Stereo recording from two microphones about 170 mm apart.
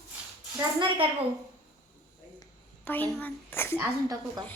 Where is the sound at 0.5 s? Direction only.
30° right (ahead or behind).